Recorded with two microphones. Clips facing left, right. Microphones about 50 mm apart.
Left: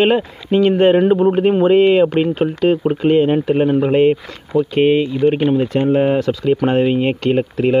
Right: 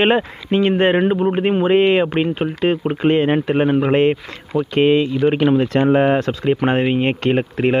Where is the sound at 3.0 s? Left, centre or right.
Right.